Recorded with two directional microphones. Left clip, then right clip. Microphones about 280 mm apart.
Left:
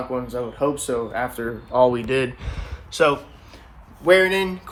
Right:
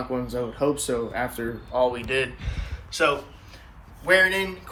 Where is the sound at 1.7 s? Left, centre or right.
Left.